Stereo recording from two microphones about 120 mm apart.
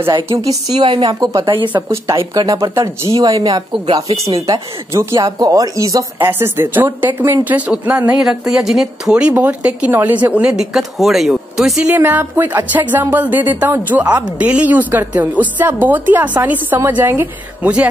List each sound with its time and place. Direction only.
0.4 s speech: 30° right (ahead or behind)
0.8 s speech: 45° right (ahead or behind)
1.8 s speech: 25° right (ahead or behind)
3.7 s speech: 50° right (ahead or behind)
4.4 s speech: 25° right (ahead or behind)
6.1 s a woman's voice: 20° right (ahead or behind)
11.9 s a woman's voice: 15° right (ahead or behind)